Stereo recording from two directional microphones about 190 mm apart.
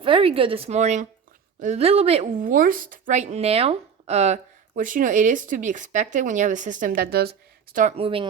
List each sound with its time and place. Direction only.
0.0 s a woman's voice: 30° right (ahead or behind); by 7.9 s 45° right (ahead or behind)
7.9 s a woman's voice: 30° right (ahead or behind)